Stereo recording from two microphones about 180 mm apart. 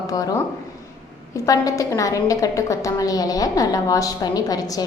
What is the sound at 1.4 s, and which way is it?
A woman's voice, 20° left (ahead or behind).